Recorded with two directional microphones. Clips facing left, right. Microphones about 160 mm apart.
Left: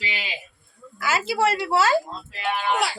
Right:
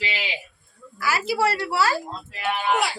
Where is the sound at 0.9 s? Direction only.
25° left (ahead or behind).